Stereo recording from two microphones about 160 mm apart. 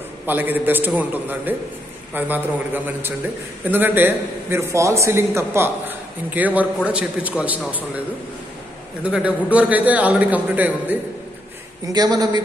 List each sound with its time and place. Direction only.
0.3 s a man's voice: 10° right (ahead or behind)
9.0 s a man's voice: 10° right (ahead or behind)
11.9 s speech: 25° right (ahead or behind)